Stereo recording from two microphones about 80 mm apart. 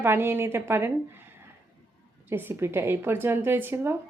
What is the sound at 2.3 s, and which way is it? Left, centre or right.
Speech, right.